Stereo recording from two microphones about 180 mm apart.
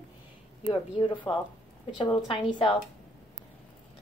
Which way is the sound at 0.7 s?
25° left (ahead or behind).